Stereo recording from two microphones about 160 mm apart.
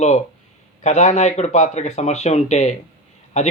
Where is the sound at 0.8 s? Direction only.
45° left (ahead or behind).